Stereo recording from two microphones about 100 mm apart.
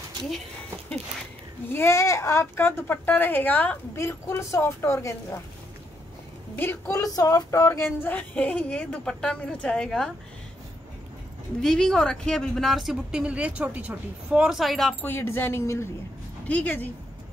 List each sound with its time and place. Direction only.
1.7 s a woman's voice: 25° left (ahead or behind)
6.5 s a woman's voice: 20° left (ahead or behind)
7.0 s speech: 40° left (ahead or behind); by 10.1 s 5° left (ahead or behind)
11.6 s speech: 5° left (ahead or behind)
15.0 s a woman's voice: 20° left (ahead or behind)
16.4 s speech: 15° left (ahead or behind)